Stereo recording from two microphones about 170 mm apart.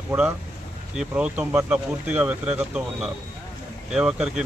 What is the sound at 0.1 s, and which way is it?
Speech, 10° right (ahead or behind).